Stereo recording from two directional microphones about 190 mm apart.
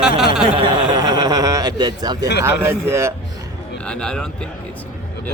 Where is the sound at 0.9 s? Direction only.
20° right (ahead or behind).